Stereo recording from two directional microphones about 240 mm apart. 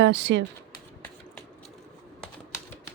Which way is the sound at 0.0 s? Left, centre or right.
Right.